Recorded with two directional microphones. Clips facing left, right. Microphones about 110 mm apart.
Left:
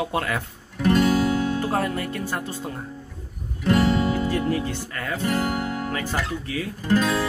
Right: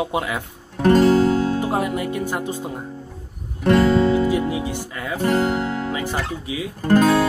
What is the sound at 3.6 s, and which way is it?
Music, 70° right (ahead or behind).